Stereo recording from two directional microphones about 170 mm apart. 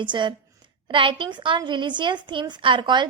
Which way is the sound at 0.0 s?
25° right (ahead or behind).